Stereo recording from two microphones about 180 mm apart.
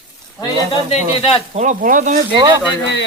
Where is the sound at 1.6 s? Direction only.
45° right (ahead or behind).